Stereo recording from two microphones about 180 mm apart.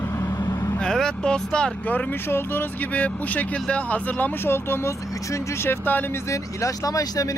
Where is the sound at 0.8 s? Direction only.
5° left (ahead or behind).